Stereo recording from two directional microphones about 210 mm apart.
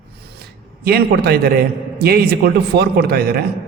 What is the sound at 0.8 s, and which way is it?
A man's voice, 50° right (ahead or behind).